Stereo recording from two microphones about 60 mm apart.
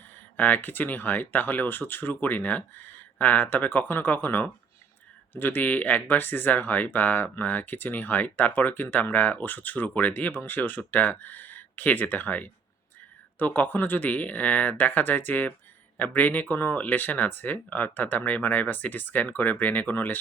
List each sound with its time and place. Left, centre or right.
0.3 s speech: left